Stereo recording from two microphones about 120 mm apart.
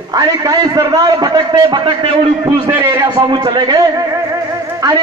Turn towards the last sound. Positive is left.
turn(degrees=-35)  # may be behind; listen again after turning